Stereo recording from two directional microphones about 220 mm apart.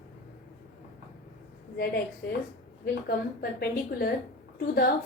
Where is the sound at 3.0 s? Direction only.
45° left (ahead or behind).